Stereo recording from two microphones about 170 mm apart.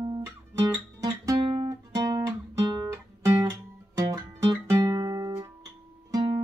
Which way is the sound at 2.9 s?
20° right (ahead or behind).